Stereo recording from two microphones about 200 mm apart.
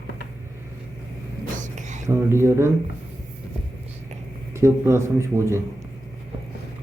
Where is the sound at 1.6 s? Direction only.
35° right (ahead or behind).